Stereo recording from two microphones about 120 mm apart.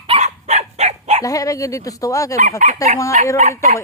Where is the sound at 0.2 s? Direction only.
65° right (ahead or behind).